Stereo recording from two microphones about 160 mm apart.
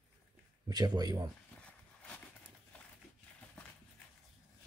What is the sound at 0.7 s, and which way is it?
Speech, 25° right (ahead or behind).